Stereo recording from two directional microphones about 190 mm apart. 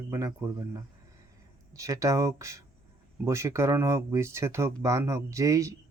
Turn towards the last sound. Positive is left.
turn(degrees=-15)  # may be behind; listen again after turning